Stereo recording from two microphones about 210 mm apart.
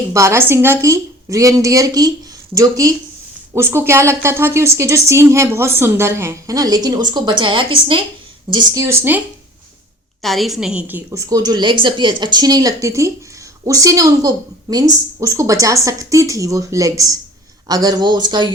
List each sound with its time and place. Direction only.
0.1 s a woman's voice: 15° right (ahead or behind)
10.2 s a woman's voice: centre (ahead or behind); by 18.4 s 20° right (ahead or behind)